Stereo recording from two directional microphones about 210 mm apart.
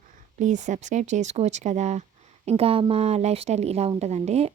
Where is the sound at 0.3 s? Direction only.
35° right (ahead or behind).